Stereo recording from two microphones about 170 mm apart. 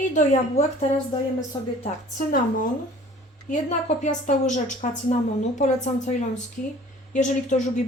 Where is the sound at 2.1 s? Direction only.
50° left (ahead or behind).